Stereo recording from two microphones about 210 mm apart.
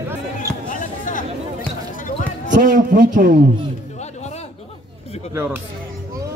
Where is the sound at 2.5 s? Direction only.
40° right (ahead or behind).